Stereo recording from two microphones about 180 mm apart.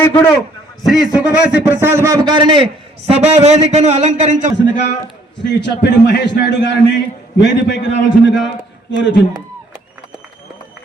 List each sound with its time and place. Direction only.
0.0 s a man's voice: 10° left (ahead or behind)
0.8 s a man's voice: centre (ahead or behind); by 2.6 s 25° right (ahead or behind)
3.1 s a man's voice: 40° right (ahead or behind)
5.4 s a man's voice: 75° left (ahead or behind)